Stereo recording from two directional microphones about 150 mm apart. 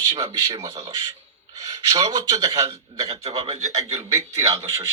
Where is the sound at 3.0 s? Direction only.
40° right (ahead or behind).